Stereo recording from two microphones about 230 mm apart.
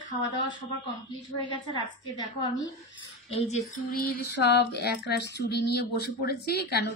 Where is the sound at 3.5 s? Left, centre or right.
Left.